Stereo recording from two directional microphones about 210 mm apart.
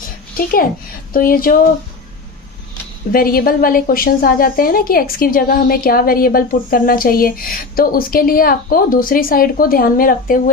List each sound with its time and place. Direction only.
1.1 s a woman's voice: 45° left (ahead or behind)
3.1 s a woman's voice: 45° left (ahead or behind)